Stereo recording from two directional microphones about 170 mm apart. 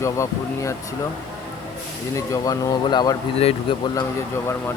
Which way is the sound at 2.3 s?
25° left (ahead or behind).